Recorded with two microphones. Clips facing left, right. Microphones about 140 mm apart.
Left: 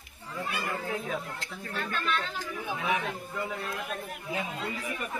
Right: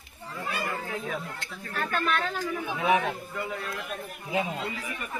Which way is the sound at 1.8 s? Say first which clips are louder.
Right 4 dB; 50° right (ahead or behind).